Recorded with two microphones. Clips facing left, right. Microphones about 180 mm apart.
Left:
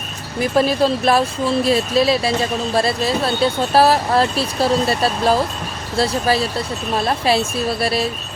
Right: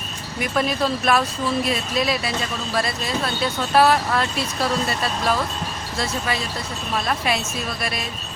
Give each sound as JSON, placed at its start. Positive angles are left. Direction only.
{"t": 0.3, "sound": "speech", "side_deg": 30}